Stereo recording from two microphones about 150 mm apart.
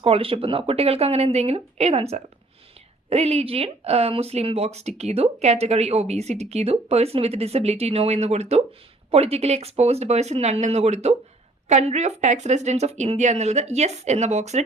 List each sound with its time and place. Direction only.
0.0 s speech: 40° right (ahead or behind)